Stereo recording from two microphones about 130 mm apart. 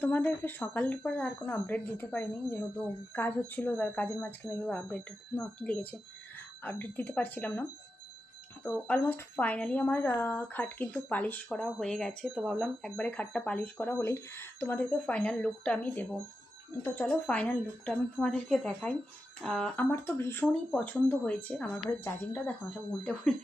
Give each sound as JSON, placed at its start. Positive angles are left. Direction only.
{"t": 0.0, "sound": "speech", "side_deg": 15}
{"t": 8.9, "sound": "speech", "side_deg": 15}
{"t": 12.3, "sound": "speech", "side_deg": -5}
{"t": 13.0, "sound": "speech", "side_deg": 10}
{"t": 19.8, "sound": "speech", "side_deg": 15}